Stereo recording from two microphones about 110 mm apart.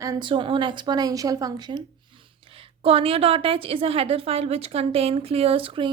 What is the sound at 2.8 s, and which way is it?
A woman's voice, 60° right (ahead or behind).